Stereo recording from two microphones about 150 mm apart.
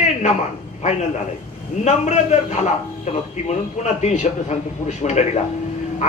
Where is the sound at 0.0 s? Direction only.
50° left (ahead or behind).